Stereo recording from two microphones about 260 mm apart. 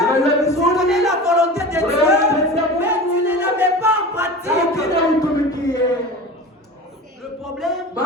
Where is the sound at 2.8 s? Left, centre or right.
Centre.